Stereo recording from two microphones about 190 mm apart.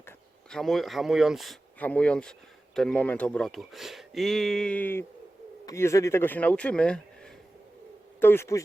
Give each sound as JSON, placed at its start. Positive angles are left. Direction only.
{"t": 0.5, "sound": "speech", "side_deg": 0}
{"t": 8.2, "sound": "speech", "side_deg": 10}